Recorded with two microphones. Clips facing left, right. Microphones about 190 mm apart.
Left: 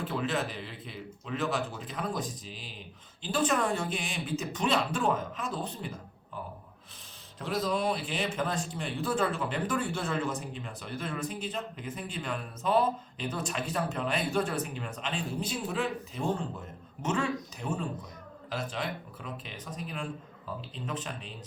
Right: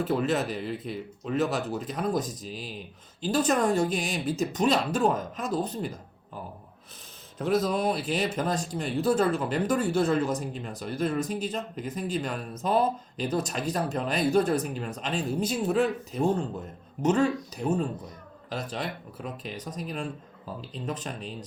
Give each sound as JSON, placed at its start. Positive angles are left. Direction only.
{"t": 0.0, "sound": "a man's voice", "side_deg": -45}
{"t": 7.3, "sound": "a man's voice", "side_deg": -45}